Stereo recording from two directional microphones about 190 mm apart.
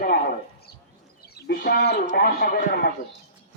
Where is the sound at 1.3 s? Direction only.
60° left (ahead or behind).